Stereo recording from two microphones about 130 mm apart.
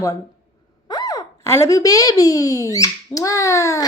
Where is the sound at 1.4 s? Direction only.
20° left (ahead or behind).